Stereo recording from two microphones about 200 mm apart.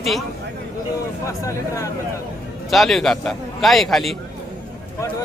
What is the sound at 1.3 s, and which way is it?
Speech, 15° left (ahead or behind).